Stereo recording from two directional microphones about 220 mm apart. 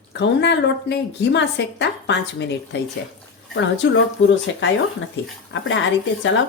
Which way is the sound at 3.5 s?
55° left (ahead or behind).